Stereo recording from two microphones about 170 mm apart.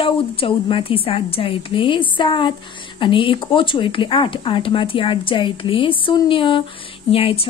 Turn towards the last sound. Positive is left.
turn(degrees=35)  # may be behind; listen again after turning